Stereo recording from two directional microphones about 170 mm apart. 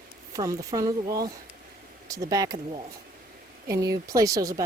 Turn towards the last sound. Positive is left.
turn(degrees=-20)  # may be behind; listen again after turning